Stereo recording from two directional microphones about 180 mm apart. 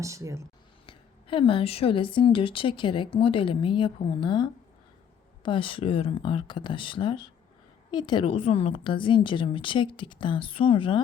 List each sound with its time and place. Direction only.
0.0 s speech: 15° right (ahead or behind)
0.9 s a woman's voice: 30° left (ahead or behind)